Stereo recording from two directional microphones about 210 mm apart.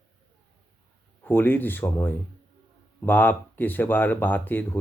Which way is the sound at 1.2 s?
10° left (ahead or behind).